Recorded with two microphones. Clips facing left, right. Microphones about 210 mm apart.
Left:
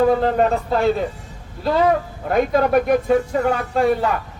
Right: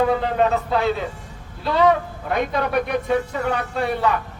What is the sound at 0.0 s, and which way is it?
Speech, 45° left (ahead or behind).